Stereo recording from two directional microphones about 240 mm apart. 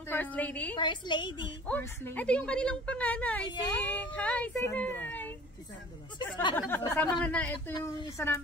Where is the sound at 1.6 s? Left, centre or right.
Centre.